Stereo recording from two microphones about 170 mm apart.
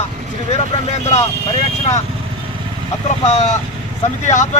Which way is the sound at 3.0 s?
40° left (ahead or behind).